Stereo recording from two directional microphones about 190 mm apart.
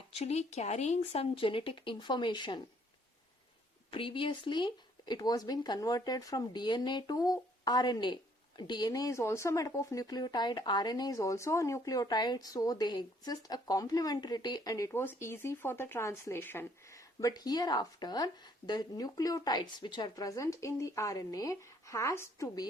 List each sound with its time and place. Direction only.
0.1 s speech: 35° left (ahead or behind)
3.9 s speech: 25° left (ahead or behind)